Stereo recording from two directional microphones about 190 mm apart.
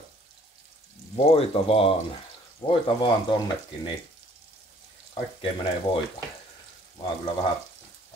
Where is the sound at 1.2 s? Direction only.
30° left (ahead or behind).